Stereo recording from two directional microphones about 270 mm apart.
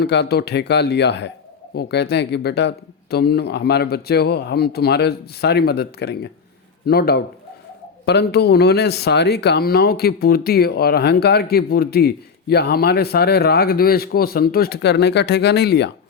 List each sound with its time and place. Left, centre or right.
0.0 s speech: left